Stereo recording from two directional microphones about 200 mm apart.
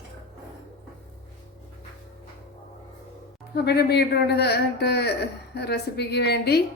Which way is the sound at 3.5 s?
55° left (ahead or behind).